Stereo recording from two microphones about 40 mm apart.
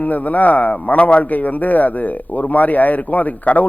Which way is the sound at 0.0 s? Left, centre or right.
Left.